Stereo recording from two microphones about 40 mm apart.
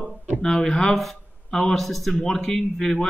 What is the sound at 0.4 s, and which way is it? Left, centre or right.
A man's voice, centre.